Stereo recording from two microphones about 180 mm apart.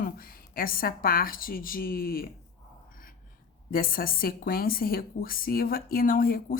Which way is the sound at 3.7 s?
55° left (ahead or behind).